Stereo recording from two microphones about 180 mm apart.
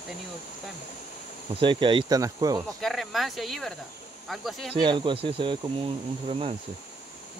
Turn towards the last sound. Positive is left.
turn(degrees=-30)  # may be behind; listen again after turning